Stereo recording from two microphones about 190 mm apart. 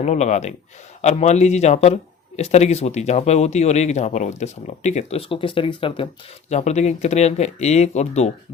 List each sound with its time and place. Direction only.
0.0 s a man's voice: 35° left (ahead or behind)